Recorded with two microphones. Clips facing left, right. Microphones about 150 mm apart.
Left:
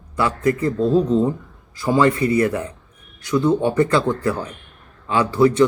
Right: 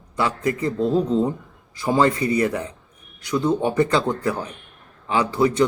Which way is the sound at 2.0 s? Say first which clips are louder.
Left 2 dB; 25° right (ahead or behind).